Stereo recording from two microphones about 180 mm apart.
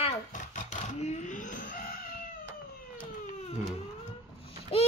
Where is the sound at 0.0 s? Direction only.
45° left (ahead or behind).